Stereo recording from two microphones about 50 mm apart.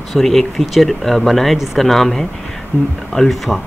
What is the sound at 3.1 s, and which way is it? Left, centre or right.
Speech, centre.